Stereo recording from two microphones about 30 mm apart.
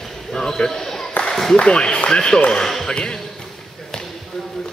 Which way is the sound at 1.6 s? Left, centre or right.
Left.